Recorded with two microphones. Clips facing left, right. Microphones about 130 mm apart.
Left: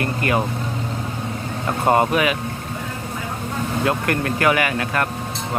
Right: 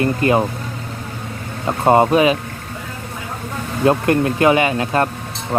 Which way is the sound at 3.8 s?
25° right (ahead or behind).